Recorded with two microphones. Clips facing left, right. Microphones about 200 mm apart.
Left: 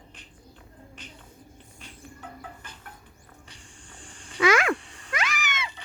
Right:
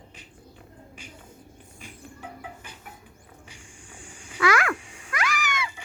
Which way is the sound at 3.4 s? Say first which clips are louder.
Right 2 dB; 10° right (ahead or behind).